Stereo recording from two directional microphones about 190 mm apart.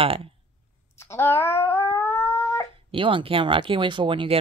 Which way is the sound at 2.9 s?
25° right (ahead or behind).